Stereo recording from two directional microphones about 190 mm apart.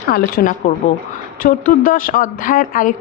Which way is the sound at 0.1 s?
50° left (ahead or behind).